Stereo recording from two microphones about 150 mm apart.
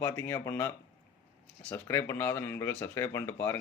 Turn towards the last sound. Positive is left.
turn(degrees=15)  # may be behind; listen again after turning